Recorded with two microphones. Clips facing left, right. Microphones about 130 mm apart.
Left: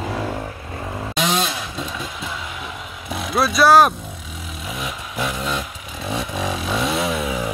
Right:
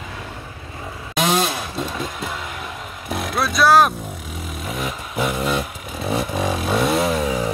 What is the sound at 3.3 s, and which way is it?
Vehicle, centre (ahead or behind).